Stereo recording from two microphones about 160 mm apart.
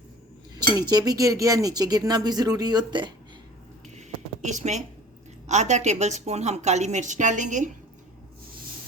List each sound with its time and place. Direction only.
0.8 s speech: 25° right (ahead or behind)
3.9 s a sound: 50° right (ahead or behind)
5.5 s a woman's voice: 45° right (ahead or behind)